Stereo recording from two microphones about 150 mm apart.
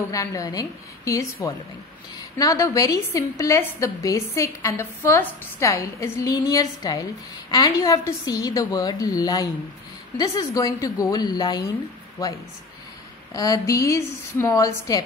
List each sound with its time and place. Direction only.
0.1 s a woman's voice: 20° left (ahead or behind)
13.3 s a woman's voice: 25° left (ahead or behind)